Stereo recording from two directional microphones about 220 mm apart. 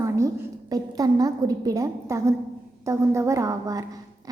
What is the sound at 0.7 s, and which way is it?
A woman's voice, 15° right (ahead or behind).